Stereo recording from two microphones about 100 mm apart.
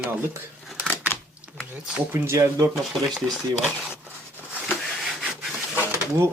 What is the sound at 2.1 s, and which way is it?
Speech, 25° right (ahead or behind).